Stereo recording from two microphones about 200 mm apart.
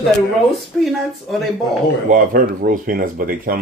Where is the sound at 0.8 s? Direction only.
Centre (ahead or behind).